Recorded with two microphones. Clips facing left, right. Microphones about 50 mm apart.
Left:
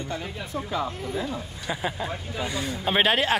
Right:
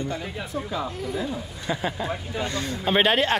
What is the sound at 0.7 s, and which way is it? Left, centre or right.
Speech, left.